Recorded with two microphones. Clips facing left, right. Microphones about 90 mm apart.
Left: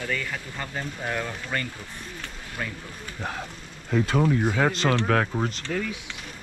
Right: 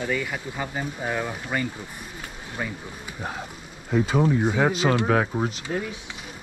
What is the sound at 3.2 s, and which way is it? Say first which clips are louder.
Speech: even; 5° right (ahead or behind).